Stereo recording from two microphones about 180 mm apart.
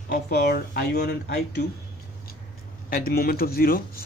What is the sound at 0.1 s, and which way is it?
Speech, 60° left (ahead or behind).